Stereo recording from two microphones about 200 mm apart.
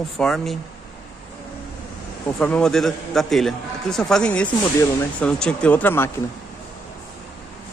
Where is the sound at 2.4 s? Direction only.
5° left (ahead or behind).